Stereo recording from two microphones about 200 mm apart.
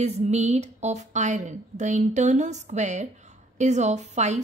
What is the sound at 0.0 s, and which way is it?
A woman's voice, 35° right (ahead or behind).